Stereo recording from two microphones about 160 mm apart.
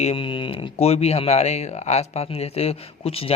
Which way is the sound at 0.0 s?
35° left (ahead or behind).